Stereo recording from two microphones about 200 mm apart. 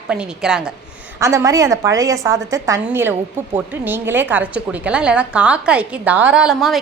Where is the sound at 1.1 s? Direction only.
15° right (ahead or behind).